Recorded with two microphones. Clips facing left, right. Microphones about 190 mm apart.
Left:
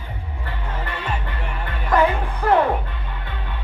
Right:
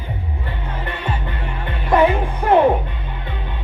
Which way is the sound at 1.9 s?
20° right (ahead or behind).